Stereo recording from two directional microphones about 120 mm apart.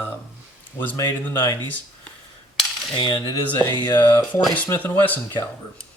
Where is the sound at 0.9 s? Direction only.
20° left (ahead or behind).